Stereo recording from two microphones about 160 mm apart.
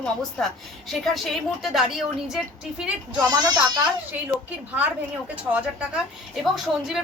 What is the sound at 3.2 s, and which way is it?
Speech, 25° right (ahead or behind).